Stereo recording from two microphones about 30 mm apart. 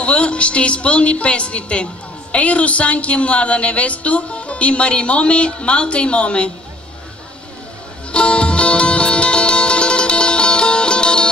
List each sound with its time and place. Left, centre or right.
0.0 s a woman's voice: left
8.1 s music: left